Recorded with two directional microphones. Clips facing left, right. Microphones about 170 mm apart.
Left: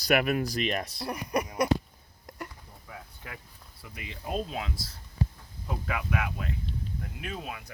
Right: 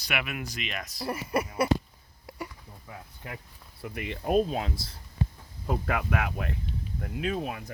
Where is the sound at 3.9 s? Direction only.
60° right (ahead or behind).